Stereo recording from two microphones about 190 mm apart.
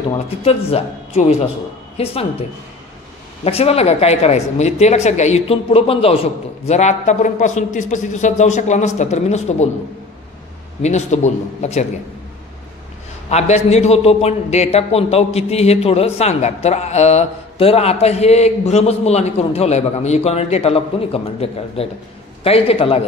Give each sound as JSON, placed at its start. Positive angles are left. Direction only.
{"t": 0.4, "sound": "a man's voice", "side_deg": 30}
{"t": 3.4, "sound": "a man's voice", "side_deg": 30}
{"t": 10.8, "sound": "a man's voice", "side_deg": 35}
{"t": 13.3, "sound": "a man's voice", "side_deg": 35}